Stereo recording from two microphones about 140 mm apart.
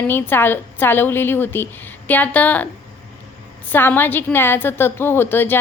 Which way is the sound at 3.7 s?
15° left (ahead or behind).